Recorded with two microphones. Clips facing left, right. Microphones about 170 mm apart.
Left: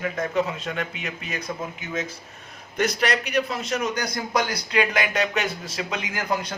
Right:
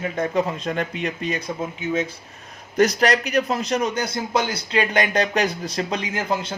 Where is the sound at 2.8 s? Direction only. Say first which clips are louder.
Right 6 dB; 40° right (ahead or behind).